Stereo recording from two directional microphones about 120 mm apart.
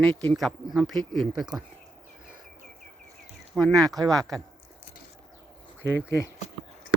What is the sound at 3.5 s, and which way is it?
Speech, 5° left (ahead or behind).